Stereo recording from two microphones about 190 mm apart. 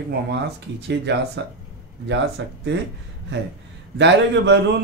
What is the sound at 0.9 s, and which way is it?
A man's voice, 65° right (ahead or behind).